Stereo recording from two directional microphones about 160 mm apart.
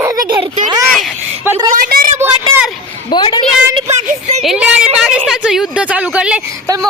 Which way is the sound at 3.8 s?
45° right (ahead or behind).